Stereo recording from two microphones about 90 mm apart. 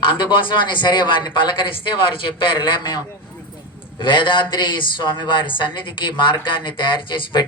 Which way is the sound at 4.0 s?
65° left (ahead or behind).